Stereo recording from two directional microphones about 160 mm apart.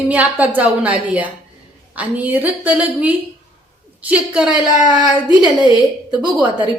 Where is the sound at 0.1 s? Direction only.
10° right (ahead or behind).